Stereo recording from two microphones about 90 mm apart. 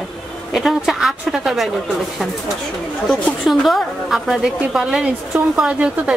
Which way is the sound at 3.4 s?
Centre (ahead or behind).